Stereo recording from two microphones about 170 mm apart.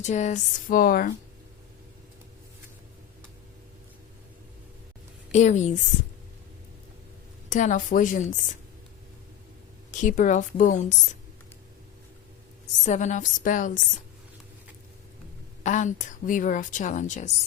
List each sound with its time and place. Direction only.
0.0 s speech: 45° left (ahead or behind)
5.3 s speech: 45° left (ahead or behind)
7.5 s speech: 45° left (ahead or behind)
9.9 s speech: 45° left (ahead or behind)
12.8 s speech: 45° left (ahead or behind)
15.6 s speech: 45° left (ahead or behind)